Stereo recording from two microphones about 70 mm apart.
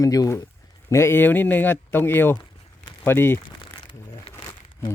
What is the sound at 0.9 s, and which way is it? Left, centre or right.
A man's voice, left.